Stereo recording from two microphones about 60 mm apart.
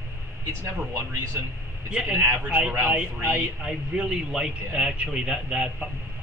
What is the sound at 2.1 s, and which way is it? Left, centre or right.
Speech, right.